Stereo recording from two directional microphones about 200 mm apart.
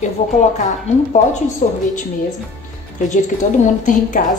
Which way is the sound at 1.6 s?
40° left (ahead or behind).